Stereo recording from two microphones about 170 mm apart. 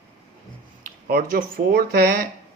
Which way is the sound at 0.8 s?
55° right (ahead or behind).